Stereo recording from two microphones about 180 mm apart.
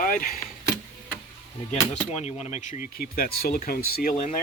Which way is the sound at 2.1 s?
40° left (ahead or behind).